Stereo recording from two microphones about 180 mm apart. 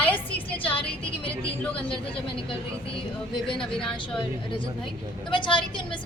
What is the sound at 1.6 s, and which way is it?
Speech, 5° left (ahead or behind).